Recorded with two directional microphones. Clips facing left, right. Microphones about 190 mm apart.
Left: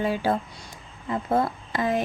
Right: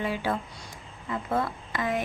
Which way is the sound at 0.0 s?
35° left (ahead or behind).